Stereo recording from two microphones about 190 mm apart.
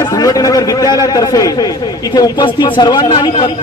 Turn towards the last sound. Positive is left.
turn(degrees=20)  # may be behind; listen again after turning